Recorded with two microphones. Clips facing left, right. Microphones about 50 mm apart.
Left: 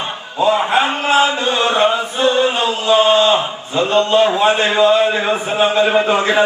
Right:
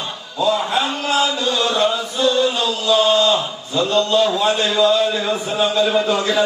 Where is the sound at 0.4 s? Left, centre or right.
Left.